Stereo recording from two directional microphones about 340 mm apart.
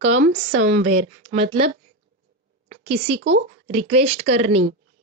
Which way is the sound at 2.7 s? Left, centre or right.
Centre.